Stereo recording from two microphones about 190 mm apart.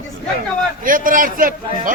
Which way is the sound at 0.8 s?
45° right (ahead or behind).